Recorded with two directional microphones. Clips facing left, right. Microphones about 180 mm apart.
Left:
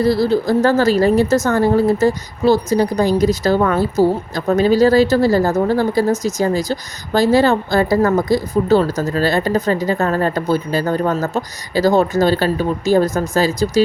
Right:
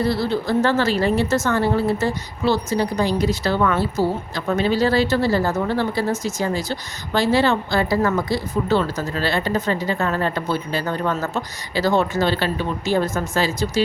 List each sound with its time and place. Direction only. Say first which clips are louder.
0.0 s speech: left 6 dB; 40° left (ahead or behind)